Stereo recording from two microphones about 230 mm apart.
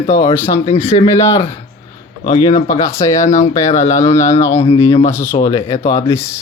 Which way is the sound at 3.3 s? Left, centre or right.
Left.